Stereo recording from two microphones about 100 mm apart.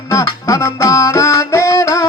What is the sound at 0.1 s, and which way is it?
Music, 35° left (ahead or behind).